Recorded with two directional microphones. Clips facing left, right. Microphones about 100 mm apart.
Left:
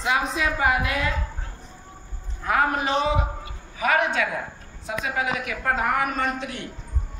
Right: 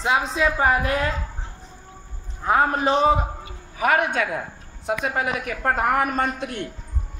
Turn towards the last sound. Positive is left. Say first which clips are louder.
# right 2 dB
turn(degrees=-55)  # may be behind; listen again after turning